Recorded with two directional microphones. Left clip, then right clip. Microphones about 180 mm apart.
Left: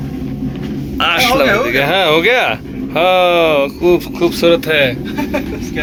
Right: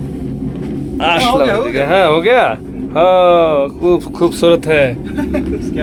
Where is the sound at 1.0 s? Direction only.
25° right (ahead or behind).